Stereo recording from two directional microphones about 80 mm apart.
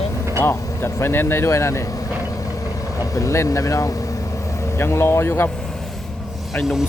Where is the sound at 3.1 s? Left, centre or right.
Left.